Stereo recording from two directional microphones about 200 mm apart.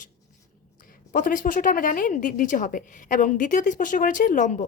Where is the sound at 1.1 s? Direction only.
40° left (ahead or behind).